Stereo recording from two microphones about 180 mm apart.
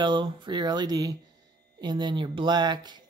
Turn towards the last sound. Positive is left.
turn(degrees=-25)  # may be behind; listen again after turning